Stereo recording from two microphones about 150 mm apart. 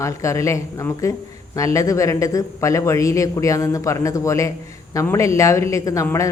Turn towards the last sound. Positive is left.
turn(degrees=20)  # may be behind; listen again after turning